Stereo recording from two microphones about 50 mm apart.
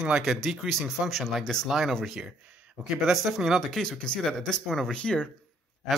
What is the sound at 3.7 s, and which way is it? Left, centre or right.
Speech, centre.